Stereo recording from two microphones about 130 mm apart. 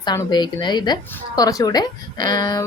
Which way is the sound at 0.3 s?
35° left (ahead or behind).